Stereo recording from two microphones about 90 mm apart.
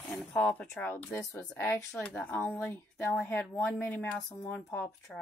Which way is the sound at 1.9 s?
15° left (ahead or behind).